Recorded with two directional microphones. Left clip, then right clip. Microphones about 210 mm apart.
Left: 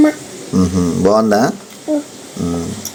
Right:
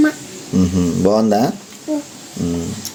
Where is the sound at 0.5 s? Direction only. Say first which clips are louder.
Left 2 dB; 25° right (ahead or behind).